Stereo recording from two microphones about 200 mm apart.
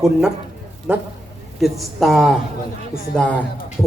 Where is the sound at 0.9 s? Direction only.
5° right (ahead or behind).